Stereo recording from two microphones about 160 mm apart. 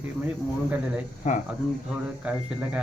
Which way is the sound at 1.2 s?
45° left (ahead or behind).